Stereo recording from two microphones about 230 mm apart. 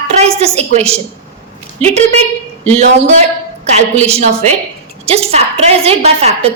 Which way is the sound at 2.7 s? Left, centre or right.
Right.